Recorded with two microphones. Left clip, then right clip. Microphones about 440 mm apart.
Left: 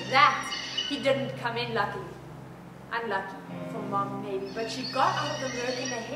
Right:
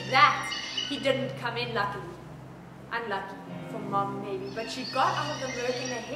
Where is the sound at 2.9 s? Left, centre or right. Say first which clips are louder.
Left 2 dB; centre.